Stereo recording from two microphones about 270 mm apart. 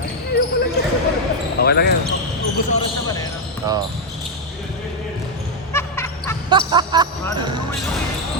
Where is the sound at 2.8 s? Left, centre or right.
Centre.